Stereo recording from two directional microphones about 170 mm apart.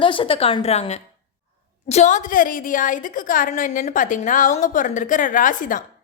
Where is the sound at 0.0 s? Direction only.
30° left (ahead or behind).